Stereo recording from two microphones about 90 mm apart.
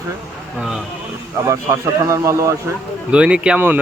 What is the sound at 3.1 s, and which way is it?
Speech, 10° right (ahead or behind).